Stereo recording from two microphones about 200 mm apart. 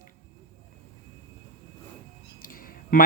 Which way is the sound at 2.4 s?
45° left (ahead or behind).